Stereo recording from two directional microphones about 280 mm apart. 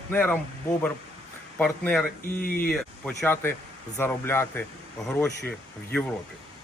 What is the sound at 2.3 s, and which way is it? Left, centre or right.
Speech, left.